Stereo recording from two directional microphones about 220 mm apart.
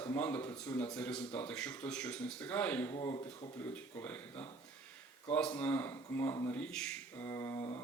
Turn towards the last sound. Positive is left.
turn(degrees=15)  # may be behind; listen again after turning